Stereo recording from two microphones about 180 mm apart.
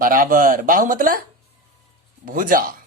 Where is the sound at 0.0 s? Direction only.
50° right (ahead or behind).